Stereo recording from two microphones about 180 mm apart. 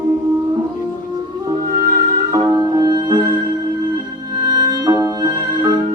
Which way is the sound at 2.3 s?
20° right (ahead or behind).